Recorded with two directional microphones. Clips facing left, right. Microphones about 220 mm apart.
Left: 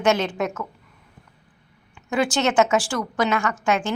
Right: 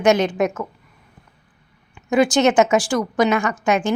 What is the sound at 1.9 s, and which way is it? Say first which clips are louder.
A woman's voice: right 6 dB; 15° right (ahead or behind).